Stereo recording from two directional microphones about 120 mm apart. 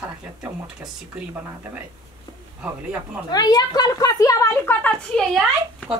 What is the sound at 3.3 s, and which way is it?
A woman's voice, 35° left (ahead or behind).